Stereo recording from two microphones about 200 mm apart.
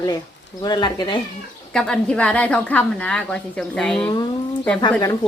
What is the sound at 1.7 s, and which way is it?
A woman's voice, 5° left (ahead or behind).